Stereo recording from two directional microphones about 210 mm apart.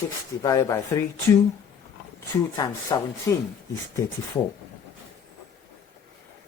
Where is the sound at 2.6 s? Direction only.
15° left (ahead or behind).